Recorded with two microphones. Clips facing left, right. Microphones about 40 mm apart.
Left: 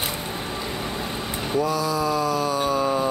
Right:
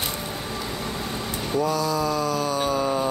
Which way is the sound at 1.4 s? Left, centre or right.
Centre.